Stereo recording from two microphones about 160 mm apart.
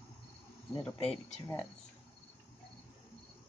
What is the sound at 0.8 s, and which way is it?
Speech, 10° left (ahead or behind).